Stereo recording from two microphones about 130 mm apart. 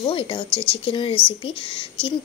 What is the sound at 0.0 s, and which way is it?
Speech, 40° left (ahead or behind).